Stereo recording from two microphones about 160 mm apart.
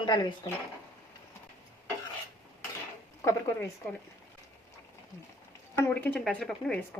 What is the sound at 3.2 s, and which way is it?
Speech, 20° left (ahead or behind).